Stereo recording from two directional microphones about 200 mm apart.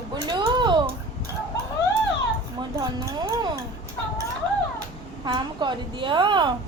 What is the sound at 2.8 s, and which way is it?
Speech, 20° right (ahead or behind).